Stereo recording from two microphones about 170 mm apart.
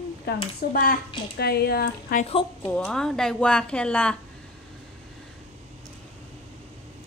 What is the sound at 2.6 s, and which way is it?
Speech, 5° left (ahead or behind).